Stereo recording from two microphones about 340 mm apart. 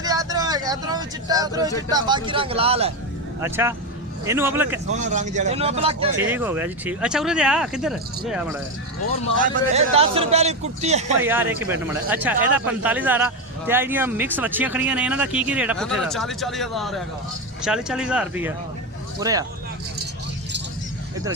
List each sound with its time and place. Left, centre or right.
0.0 s a sound: centre
1.9 s speech: centre
4.9 s a man's voice: right
6.2 s speech: centre
9.4 s a man's voice: right
11.2 s speech: centre